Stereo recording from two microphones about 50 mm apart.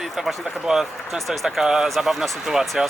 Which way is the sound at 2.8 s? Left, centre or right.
Centre.